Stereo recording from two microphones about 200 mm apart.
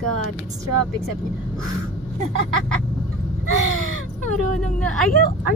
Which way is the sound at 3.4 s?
90° right.